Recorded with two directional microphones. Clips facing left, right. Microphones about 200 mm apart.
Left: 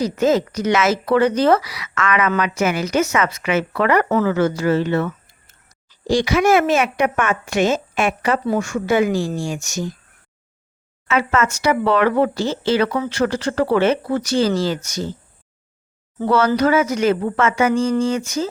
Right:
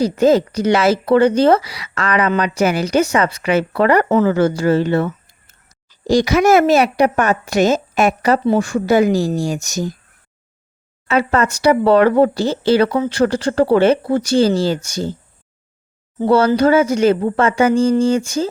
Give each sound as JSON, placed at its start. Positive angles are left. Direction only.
{"t": 0.0, "sound": "speech", "side_deg": -35}
{"t": 11.1, "sound": "speech", "side_deg": -35}
{"t": 16.1, "sound": "speech", "side_deg": -30}